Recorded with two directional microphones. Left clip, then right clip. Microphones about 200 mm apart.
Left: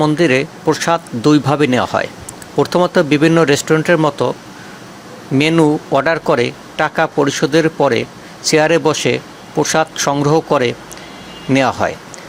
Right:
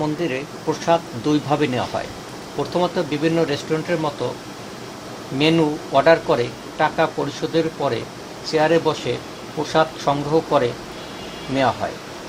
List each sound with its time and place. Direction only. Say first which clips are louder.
0.0 s speech: left 10 dB; 40° left (ahead or behind)
5.4 s speech: left 5 dB; 40° left (ahead or behind)